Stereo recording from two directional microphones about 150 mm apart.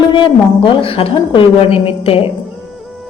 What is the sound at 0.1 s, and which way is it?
A woman's voice, 35° left (ahead or behind).